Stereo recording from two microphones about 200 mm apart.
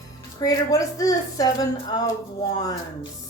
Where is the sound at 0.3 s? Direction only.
15° left (ahead or behind).